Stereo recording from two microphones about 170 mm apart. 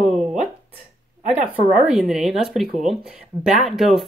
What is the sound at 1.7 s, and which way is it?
Speech, 5° right (ahead or behind).